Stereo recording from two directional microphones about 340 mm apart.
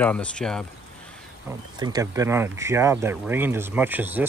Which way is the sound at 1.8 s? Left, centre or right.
Centre.